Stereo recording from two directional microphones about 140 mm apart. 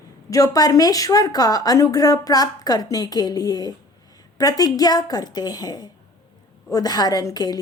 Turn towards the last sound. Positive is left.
turn(degrees=25)  # may be behind; listen again after turning